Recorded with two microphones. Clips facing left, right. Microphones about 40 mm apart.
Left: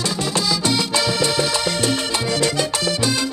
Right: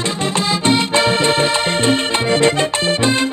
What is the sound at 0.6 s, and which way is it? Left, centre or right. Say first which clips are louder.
Music: right 5 dB; right.